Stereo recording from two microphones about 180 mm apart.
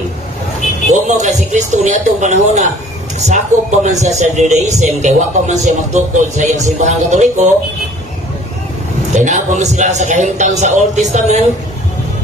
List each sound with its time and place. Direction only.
0.8 s a man's voice: 40° right (ahead or behind)
9.1 s a man's voice: 40° right (ahead or behind)